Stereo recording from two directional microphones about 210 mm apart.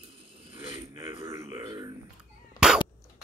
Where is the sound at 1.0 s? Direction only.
25° right (ahead or behind).